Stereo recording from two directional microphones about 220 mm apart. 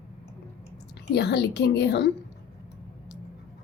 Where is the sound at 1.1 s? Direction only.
50° left (ahead or behind).